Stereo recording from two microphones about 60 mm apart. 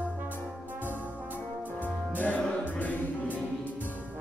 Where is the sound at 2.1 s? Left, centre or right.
Left.